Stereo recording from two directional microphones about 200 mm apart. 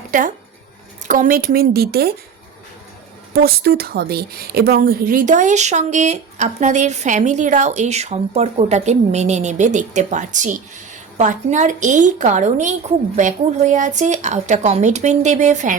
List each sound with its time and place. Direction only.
0.1 s speech: 40° right (ahead or behind)
3.3 s speech: 50° right (ahead or behind)